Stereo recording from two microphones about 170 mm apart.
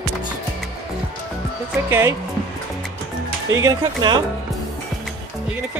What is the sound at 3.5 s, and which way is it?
Speech, 25° right (ahead or behind).